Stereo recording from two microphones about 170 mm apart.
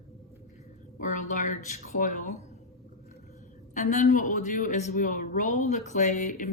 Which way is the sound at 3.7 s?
45° left (ahead or behind).